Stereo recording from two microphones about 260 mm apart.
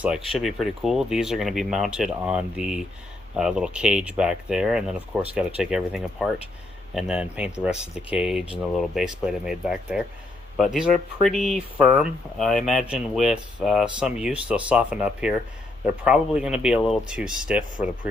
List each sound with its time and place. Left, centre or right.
0.3 s speech: centre